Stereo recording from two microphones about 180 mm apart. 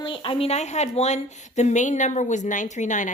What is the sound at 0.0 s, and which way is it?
A woman's voice, 30° left (ahead or behind).